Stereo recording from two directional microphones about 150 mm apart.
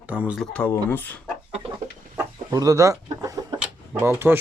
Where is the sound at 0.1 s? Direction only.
10° right (ahead or behind).